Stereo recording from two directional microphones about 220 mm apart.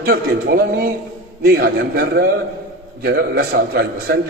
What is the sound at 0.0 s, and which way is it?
A man's voice, 45° right (ahead or behind).